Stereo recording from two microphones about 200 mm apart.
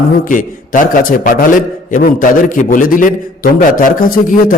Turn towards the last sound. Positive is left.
turn(degrees=45)  # may be behind; listen again after turning